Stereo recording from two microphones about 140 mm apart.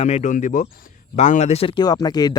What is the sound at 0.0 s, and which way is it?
Speech, 55° left (ahead or behind).